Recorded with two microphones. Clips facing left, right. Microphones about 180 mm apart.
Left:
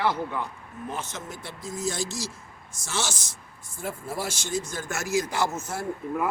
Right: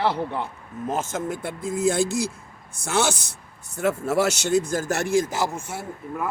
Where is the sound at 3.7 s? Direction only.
75° right (ahead or behind); by 5.3 s 55° right (ahead or behind).